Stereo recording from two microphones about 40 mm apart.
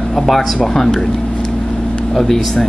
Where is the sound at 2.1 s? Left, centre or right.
Centre.